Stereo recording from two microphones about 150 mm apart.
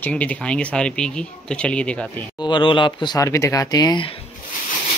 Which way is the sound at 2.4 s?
30° left (ahead or behind).